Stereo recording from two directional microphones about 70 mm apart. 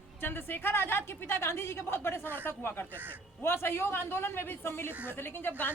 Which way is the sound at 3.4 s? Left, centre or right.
Left.